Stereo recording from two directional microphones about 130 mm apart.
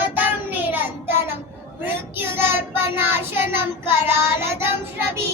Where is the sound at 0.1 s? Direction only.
15° right (ahead or behind).